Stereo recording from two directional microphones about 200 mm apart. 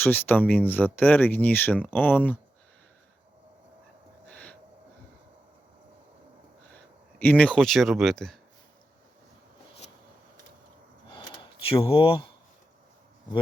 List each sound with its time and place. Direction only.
0.0 s speech: 10° left (ahead or behind)
4.3 s owl: 5° left (ahead or behind)
7.3 s speech: 5° left (ahead or behind)
11.6 s speech: 25° left (ahead or behind)